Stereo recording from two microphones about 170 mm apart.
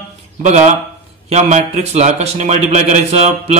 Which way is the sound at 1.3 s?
40° right (ahead or behind).